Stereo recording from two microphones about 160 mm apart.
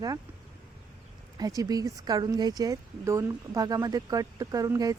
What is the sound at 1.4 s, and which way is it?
Speech, 20° right (ahead or behind).